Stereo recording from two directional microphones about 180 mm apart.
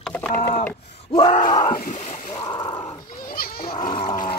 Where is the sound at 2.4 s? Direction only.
25° left (ahead or behind).